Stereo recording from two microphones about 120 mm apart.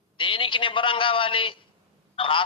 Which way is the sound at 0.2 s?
45° left (ahead or behind).